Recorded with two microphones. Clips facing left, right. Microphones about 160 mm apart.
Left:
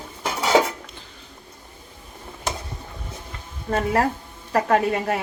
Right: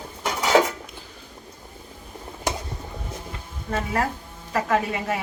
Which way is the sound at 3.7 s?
45° left (ahead or behind).